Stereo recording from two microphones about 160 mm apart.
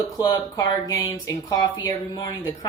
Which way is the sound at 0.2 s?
25° left (ahead or behind).